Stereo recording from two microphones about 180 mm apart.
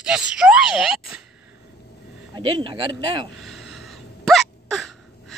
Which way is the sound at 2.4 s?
25° right (ahead or behind).